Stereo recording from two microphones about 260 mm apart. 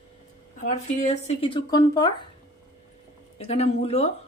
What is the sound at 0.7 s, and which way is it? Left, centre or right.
Speech, left.